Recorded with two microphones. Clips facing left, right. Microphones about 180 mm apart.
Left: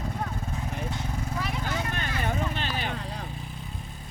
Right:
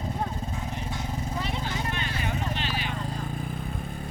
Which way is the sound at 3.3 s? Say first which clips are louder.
Right 6 dB; 50° right (ahead or behind).